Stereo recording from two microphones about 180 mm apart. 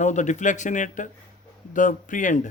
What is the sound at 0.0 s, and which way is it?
Speech, 40° left (ahead or behind).